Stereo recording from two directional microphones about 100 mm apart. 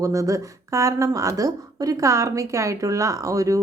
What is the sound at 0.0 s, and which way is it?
A woman's voice, 35° right (ahead or behind).